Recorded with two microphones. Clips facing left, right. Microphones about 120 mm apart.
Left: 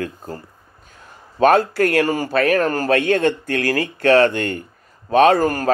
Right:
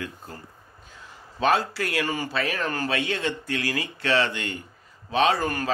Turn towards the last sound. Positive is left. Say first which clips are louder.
# left 8 dB
turn(degrees=40)  # may be behind; listen again after turning